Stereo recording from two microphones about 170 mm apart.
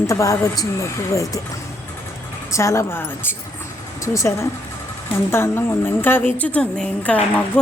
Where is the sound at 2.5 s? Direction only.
15° left (ahead or behind).